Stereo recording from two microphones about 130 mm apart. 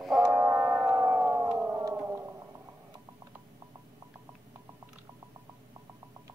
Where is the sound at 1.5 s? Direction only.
15° right (ahead or behind).